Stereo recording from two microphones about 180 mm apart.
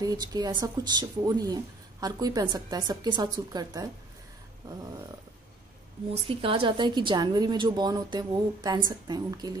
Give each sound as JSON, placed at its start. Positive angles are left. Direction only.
{"t": 0.0, "sound": "speech", "side_deg": -20}
{"t": 6.2, "sound": "speech", "side_deg": -30}